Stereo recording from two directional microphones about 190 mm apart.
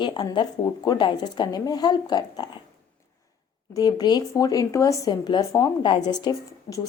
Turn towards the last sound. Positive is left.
turn(degrees=20)  # may be behind; listen again after turning